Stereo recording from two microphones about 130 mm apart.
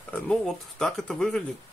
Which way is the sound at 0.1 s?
5° left (ahead or behind).